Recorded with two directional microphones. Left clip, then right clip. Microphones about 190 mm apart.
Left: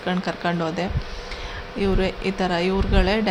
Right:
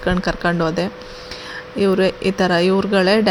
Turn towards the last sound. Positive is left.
turn(degrees=-25)  # may be behind; listen again after turning